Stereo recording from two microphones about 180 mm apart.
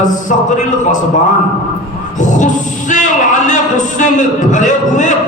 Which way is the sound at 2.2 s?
45° left (ahead or behind).